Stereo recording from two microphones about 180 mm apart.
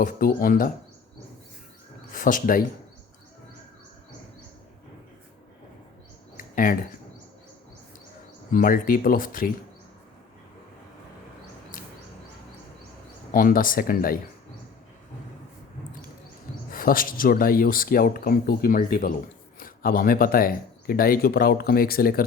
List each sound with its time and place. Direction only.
0.0 s speech: 50° left (ahead or behind)
2.1 s speech: 50° left (ahead or behind)
6.3 s a sound: 50° left (ahead or behind)
8.5 s speech: 50° left (ahead or behind)
13.3 s speech: 50° left (ahead or behind)
16.7 s speech: 50° left (ahead or behind)